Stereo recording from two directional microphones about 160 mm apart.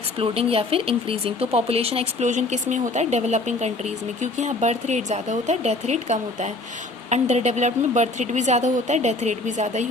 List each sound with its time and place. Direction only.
0.2 s speech: 35° right (ahead or behind)